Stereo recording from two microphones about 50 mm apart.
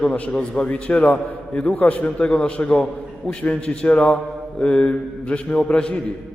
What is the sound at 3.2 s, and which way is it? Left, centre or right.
Speech, left.